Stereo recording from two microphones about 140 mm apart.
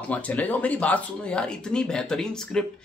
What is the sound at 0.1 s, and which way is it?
Speech, 10° left (ahead or behind).